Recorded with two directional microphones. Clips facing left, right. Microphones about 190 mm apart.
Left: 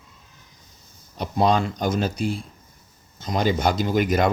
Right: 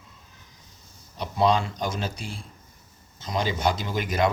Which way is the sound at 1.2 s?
50° left (ahead or behind).